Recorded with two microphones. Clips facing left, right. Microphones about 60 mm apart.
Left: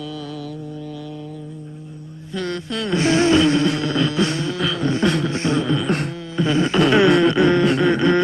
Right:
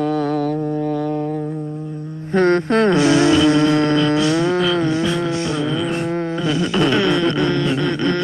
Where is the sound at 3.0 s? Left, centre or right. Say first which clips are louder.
Right 2 dB; left.